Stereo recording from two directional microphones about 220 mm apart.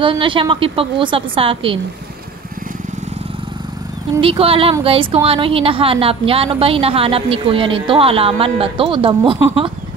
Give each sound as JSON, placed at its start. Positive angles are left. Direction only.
{"t": 0.0, "sound": "a woman's voice", "side_deg": -25}
{"t": 4.2, "sound": "a woman's voice", "side_deg": -25}